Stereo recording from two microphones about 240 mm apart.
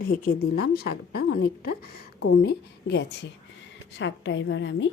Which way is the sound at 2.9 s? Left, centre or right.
Left.